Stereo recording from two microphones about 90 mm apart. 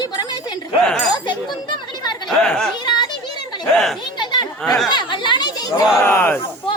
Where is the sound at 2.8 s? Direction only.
55° left (ahead or behind).